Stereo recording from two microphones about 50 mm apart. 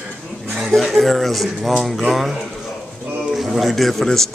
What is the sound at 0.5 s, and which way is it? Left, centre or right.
Speech, centre.